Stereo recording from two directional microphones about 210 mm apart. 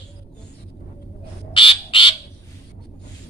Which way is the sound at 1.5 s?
25° left (ahead or behind).